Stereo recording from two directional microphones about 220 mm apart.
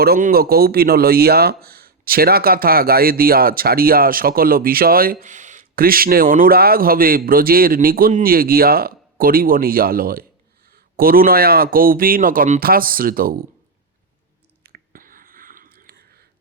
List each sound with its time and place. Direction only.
0.0 s speech: 45° right (ahead or behind)
14.6 s whispering: 45° right (ahead or behind)